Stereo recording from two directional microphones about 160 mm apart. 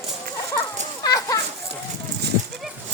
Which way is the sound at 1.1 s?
20° left (ahead or behind).